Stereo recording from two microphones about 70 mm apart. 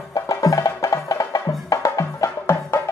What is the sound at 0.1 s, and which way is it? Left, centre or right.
Music, left.